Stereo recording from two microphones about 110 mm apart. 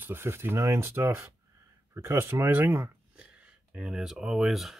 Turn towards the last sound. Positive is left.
turn(degrees=0)  # may be behind; listen again after turning